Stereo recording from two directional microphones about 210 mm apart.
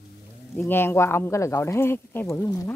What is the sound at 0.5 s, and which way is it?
Speech, 10° left (ahead or behind).